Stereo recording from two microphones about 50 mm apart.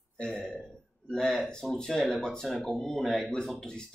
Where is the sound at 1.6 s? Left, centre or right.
Centre.